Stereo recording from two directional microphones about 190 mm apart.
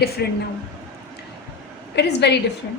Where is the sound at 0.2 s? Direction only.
60° left (ahead or behind).